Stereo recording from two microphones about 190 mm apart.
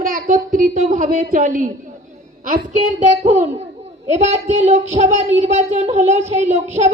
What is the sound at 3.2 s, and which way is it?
Child singing, 35° right (ahead or behind).